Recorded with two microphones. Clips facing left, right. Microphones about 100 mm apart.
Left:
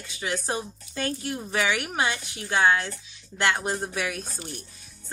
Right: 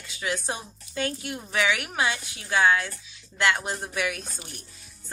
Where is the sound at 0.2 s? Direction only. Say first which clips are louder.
Left 1 dB; 30° left (ahead or behind).